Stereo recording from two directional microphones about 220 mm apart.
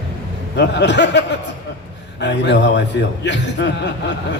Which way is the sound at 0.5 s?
50° left (ahead or behind).